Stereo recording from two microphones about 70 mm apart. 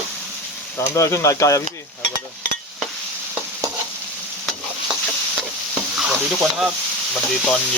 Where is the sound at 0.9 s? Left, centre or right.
Left.